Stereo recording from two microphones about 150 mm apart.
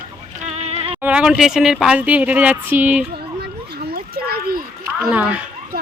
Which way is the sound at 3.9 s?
90° right.